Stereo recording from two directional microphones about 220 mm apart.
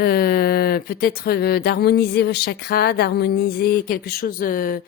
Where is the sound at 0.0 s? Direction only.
45° left (ahead or behind).